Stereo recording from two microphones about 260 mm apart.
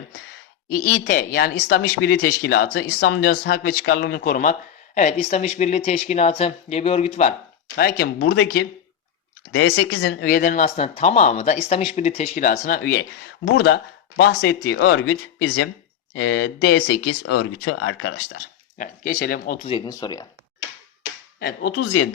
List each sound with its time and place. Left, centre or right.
0.7 s speech: left
7.8 s speech: left
17.7 s speech: left
18.8 s speech: left; by 20.2 s centre
21.3 s speech: left
21.7 s speech: left